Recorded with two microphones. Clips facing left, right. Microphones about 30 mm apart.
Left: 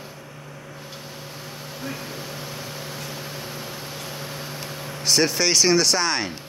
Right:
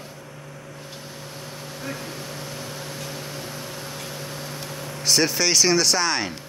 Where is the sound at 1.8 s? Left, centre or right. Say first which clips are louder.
Even; centre.